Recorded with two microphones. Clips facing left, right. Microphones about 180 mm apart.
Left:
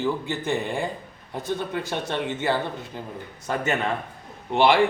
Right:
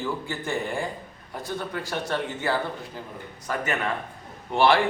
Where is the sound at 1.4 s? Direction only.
20° left (ahead or behind).